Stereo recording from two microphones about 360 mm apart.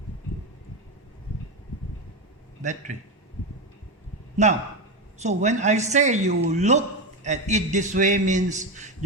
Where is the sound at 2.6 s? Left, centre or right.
Centre.